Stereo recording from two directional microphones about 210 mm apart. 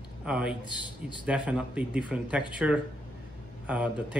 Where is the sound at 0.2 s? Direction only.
5° right (ahead or behind).